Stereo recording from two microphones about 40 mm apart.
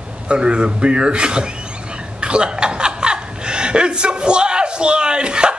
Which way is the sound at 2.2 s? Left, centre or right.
Right.